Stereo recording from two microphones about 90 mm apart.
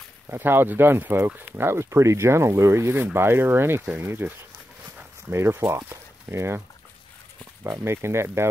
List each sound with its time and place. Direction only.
0.3 s speech: 25° right (ahead or behind)
5.3 s speech: 30° right (ahead or behind)
7.6 s speech: 30° right (ahead or behind)